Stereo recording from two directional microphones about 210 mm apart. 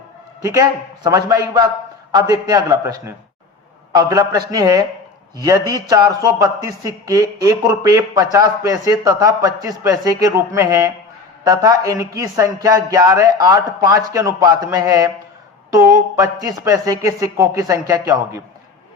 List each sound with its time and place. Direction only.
0.4 s a man's voice: 15° right (ahead or behind)